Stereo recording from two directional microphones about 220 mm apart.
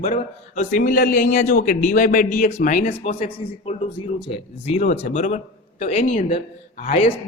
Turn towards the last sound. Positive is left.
turn(degrees=30)  # may be behind; listen again after turning